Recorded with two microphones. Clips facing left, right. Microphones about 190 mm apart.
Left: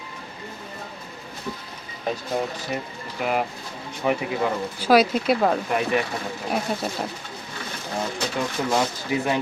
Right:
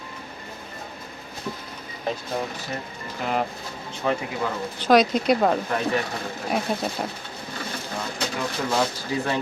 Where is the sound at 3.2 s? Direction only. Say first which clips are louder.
Left 1 dB; 10° left (ahead or behind).